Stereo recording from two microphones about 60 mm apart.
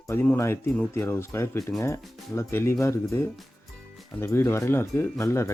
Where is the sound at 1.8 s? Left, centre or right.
Left.